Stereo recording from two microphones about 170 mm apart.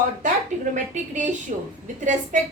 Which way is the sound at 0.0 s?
50° right (ahead or behind).